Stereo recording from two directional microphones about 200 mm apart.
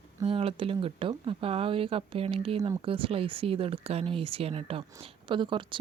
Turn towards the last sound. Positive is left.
turn(degrees=-25)  # may be behind; listen again after turning